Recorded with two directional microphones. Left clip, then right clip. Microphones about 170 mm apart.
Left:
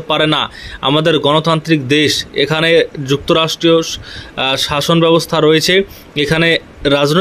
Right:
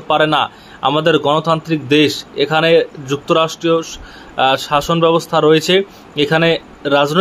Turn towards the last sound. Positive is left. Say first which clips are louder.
# left 1 dB
turn(degrees=45)  # may be behind; listen again after turning